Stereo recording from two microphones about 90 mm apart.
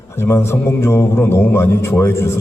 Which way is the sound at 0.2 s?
30° left (ahead or behind).